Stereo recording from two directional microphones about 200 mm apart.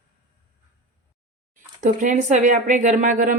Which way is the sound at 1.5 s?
40° right (ahead or behind).